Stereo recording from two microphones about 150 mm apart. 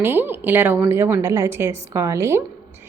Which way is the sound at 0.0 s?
15° right (ahead or behind).